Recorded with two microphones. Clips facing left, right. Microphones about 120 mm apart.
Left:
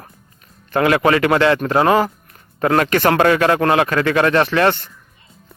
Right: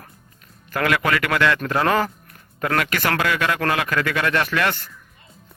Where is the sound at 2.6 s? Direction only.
35° left (ahead or behind).